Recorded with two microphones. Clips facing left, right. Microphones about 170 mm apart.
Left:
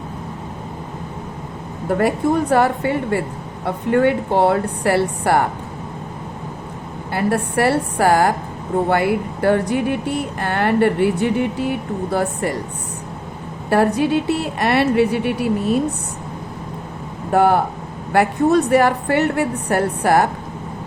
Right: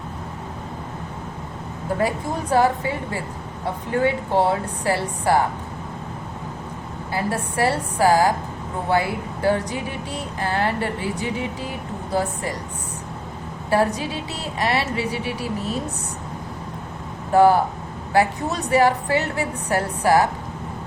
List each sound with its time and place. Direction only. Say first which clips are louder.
1.9 s speech: left 6 dB; 65° left (ahead or behind)
7.1 s speech: left 6 dB; 60° left (ahead or behind)
13.7 s speech: left 5 dB; 60° left (ahead or behind)
17.3 s speech: even; 60° left (ahead or behind)